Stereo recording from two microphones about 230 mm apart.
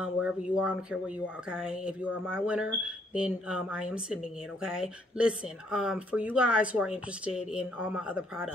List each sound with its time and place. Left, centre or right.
0.0 s speech: centre